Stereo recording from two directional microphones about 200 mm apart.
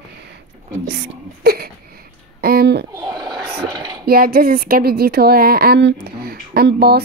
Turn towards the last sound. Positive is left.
turn(degrees=-50)  # may be behind; listen again after turning